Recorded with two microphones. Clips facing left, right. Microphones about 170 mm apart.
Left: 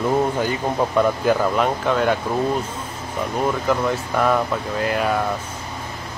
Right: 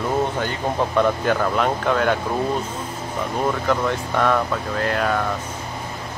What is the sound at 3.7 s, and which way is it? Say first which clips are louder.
Speech: left 1 dB; 5° left (ahead or behind).